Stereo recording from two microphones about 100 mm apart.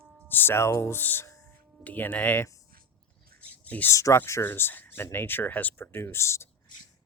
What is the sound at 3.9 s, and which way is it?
Speech, 30° left (ahead or behind).